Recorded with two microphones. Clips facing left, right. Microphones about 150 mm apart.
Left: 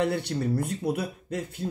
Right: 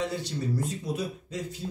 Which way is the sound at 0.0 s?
60° left (ahead or behind).